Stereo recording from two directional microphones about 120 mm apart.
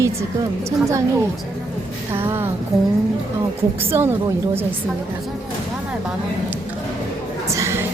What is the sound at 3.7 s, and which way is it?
Speech, 20° right (ahead or behind).